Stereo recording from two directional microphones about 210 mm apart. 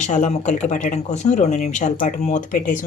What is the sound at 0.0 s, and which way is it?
Speech, 35° left (ahead or behind).